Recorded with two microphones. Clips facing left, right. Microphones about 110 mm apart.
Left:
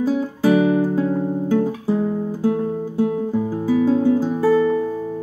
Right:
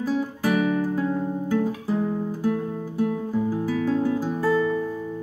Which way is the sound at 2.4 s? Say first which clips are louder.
Left 7 dB; 20° left (ahead or behind).